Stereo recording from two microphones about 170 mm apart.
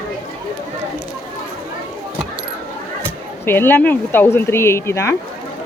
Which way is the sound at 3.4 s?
15° left (ahead or behind).